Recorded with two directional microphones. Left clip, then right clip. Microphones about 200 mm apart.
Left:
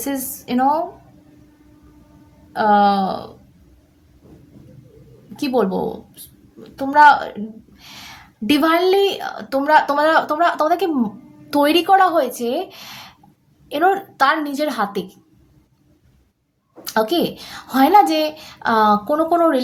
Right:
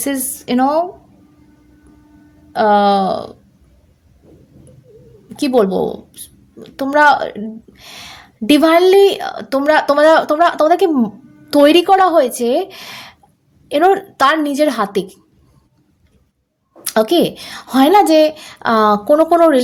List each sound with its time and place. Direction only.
0.0 s a woman's voice: 40° right (ahead or behind)
2.5 s a woman's voice: 40° right (ahead or behind)
5.4 s a woman's voice: 40° right (ahead or behind)
16.8 s a woman's voice: 40° right (ahead or behind)